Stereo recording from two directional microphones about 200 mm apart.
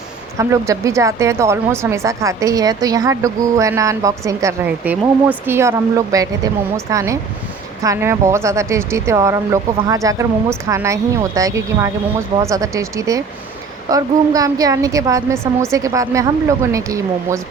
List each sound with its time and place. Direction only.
0.3 s a woman's voice: 15° right (ahead or behind)